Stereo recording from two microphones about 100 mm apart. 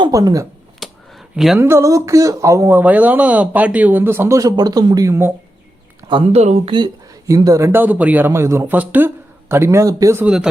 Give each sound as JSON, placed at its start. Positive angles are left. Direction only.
{"t": 0.1, "sound": "speech", "side_deg": -35}
{"t": 0.8, "sound": "a sound", "side_deg": 0}
{"t": 1.5, "sound": "speech", "side_deg": -25}
{"t": 2.7, "sound": "speech", "side_deg": -15}
{"t": 4.4, "sound": "speech", "side_deg": -40}
{"t": 6.1, "sound": "speech", "side_deg": -75}
{"t": 6.7, "sound": "speech", "side_deg": -40}
{"t": 7.7, "sound": "speech", "side_deg": -20}
{"t": 8.6, "sound": "speech", "side_deg": -15}
{"t": 10.2, "sound": "speech", "side_deg": -10}